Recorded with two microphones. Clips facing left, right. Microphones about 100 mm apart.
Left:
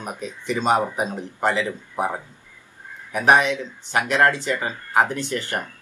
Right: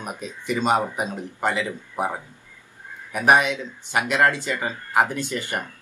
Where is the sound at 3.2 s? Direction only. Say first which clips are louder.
Left 1 dB; 10° right (ahead or behind).